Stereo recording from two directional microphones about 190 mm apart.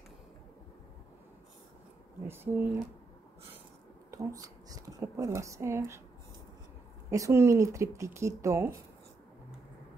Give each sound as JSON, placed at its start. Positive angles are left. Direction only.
{"t": 2.2, "sound": "speech", "side_deg": -10}
{"t": 4.1, "sound": "speech", "side_deg": -15}
{"t": 7.1, "sound": "speech", "side_deg": -15}